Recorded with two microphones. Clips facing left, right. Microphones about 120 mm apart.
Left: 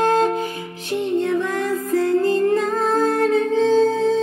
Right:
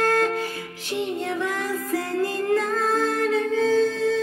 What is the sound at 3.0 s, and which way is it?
Music, 50° left (ahead or behind).